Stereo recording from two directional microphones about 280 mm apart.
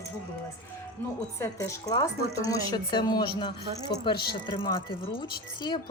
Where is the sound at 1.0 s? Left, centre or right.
Centre.